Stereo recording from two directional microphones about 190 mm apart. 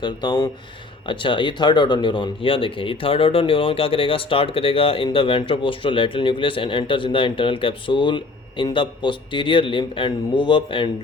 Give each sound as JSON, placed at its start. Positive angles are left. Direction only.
{"t": 0.0, "sound": "speech", "side_deg": 25}